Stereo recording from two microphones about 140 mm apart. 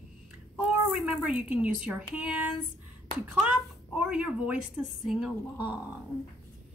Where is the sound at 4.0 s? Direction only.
10° right (ahead or behind).